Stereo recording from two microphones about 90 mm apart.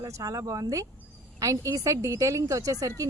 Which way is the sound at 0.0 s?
40° right (ahead or behind).